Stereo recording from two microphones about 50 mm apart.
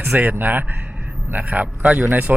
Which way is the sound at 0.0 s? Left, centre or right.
Right.